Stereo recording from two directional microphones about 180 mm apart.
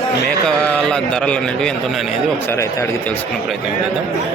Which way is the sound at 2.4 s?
15° left (ahead or behind).